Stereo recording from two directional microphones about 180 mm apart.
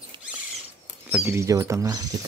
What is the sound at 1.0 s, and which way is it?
Speech, 15° right (ahead or behind).